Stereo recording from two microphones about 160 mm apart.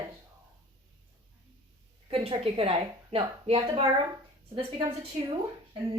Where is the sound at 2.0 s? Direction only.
40° right (ahead or behind).